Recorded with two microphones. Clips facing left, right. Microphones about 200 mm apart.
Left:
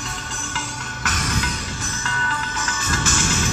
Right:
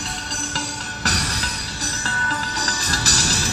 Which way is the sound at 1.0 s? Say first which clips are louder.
Left 1 dB; 35° right (ahead or behind).